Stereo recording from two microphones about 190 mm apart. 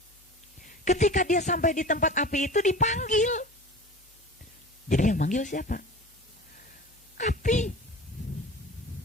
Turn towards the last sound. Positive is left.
turn(degrees=40)  # may be behind; listen again after turning